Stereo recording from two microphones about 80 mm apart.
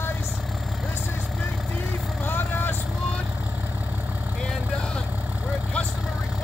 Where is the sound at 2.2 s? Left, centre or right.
Left.